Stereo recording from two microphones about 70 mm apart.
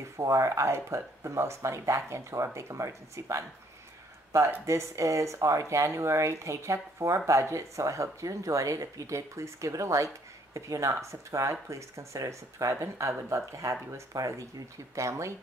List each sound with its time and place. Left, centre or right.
0.0 s speech: right
4.6 s speech: right